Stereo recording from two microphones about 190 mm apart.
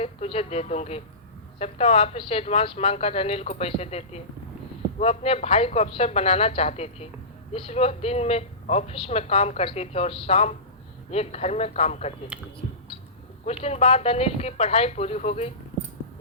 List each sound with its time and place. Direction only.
0.0 s a man's voice: 30° left (ahead or behind)
12.3 s speech: 5° right (ahead or behind)
13.4 s a man's voice: 35° left (ahead or behind)